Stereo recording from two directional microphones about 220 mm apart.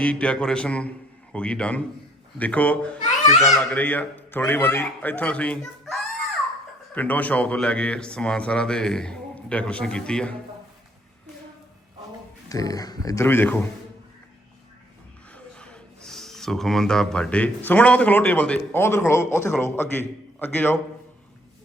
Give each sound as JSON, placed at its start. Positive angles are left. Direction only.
{"t": 0.0, "sound": "speech", "side_deg": 5}
{"t": 12.5, "sound": "speech", "side_deg": 15}
{"t": 15.4, "sound": "speech", "side_deg": 5}